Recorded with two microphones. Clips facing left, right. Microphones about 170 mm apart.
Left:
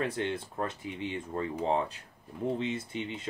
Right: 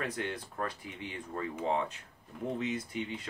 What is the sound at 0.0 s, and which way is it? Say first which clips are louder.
Speech: left 4 dB; 25° left (ahead or behind).